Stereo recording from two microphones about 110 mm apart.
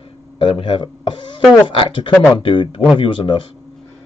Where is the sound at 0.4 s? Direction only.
50° left (ahead or behind).